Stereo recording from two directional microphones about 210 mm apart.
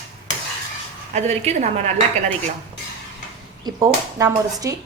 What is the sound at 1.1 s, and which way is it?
Speech, 30° right (ahead or behind).